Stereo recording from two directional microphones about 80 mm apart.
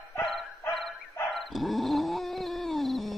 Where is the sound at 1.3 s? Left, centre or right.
Centre.